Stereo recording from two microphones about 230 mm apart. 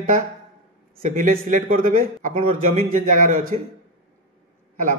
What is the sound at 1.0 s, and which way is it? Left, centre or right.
A man's voice, right.